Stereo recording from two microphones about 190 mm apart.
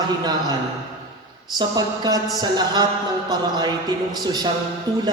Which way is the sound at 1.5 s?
20° right (ahead or behind).